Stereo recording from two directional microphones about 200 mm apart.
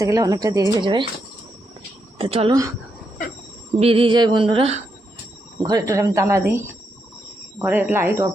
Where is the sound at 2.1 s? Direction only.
30° right (ahead or behind).